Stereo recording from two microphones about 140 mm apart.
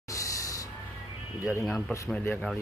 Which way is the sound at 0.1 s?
25° left (ahead or behind).